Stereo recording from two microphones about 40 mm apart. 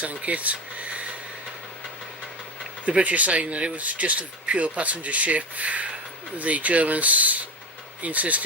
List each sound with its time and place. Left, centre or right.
0.0 s speech: right
2.8 s speech: right